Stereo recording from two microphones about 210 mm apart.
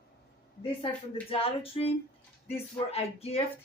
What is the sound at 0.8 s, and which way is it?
Speech, 25° left (ahead or behind).